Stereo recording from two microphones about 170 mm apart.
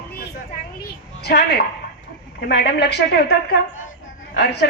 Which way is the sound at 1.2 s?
75° left (ahead or behind).